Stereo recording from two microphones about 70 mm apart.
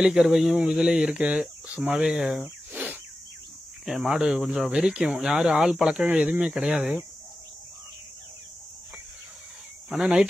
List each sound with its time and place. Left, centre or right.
0.0 s speech: centre
2.4 s a sound: right
3.8 s speech: centre
9.8 s speech: centre